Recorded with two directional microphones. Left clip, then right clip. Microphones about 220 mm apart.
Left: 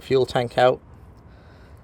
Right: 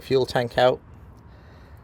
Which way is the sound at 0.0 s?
10° left (ahead or behind).